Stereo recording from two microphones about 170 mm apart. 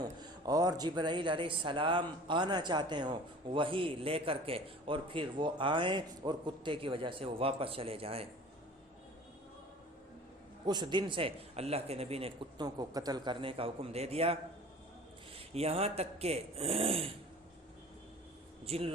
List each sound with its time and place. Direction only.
0.0 s speech: 25° right (ahead or behind)
10.7 s speech: 25° right (ahead or behind)
12.6 s speech: 20° right (ahead or behind)
15.5 s speech: 35° right (ahead or behind)
18.6 s speech: 35° right (ahead or behind)